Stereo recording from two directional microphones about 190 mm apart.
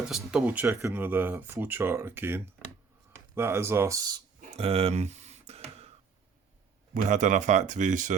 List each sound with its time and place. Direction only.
0.3 s speech: 5° right (ahead or behind)
4.4 s a sound: 30° right (ahead or behind)
6.9 s speech: 40° right (ahead or behind)